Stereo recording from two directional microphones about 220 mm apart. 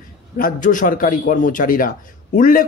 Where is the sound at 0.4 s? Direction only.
35° left (ahead or behind).